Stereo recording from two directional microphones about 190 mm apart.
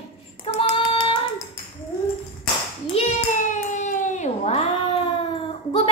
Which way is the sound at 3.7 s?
40° left (ahead or behind).